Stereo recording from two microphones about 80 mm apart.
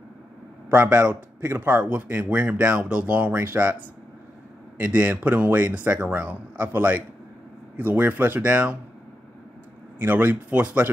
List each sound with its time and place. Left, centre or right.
0.7 s a man's voice: centre
1.5 s speech: right
1.8 s speech: centre
4.7 s speech: centre
9.9 s speech: right